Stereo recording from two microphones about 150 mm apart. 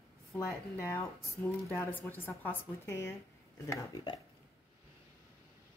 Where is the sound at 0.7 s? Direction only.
20° left (ahead or behind).